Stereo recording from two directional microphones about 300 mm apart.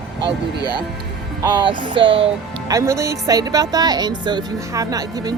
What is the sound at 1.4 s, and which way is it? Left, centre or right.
Speech, centre.